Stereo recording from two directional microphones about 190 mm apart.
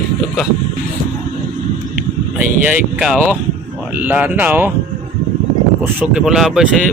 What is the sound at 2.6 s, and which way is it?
Speech, 5° right (ahead or behind).